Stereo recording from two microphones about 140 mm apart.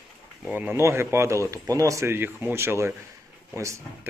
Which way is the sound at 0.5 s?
15° right (ahead or behind).